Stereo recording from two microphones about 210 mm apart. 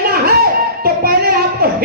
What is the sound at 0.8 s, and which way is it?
Child singing, 45° right (ahead or behind).